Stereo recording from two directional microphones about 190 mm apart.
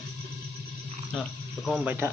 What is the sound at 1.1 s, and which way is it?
Speech, centre (ahead or behind).